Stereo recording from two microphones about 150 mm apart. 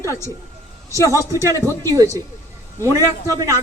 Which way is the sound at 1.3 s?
20° right (ahead or behind).